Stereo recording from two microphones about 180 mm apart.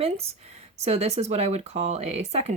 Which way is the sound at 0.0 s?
35° right (ahead or behind).